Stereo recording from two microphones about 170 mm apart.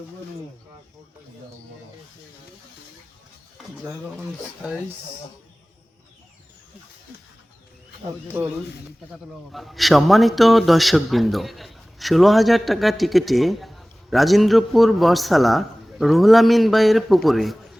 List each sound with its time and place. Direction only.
4.2 s a man's voice: 5° right (ahead or behind)
8.3 s speech: 15° right (ahead or behind)
9.5 s a man's voice: centre (ahead or behind)